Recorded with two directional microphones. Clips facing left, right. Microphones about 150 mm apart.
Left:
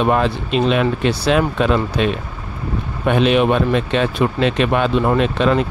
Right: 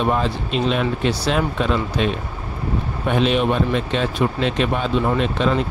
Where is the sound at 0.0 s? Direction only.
70° left (ahead or behind).